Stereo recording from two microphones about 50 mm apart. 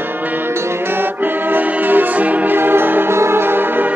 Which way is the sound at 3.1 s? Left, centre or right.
Right.